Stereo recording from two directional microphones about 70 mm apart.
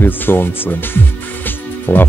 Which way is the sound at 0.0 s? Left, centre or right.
Left.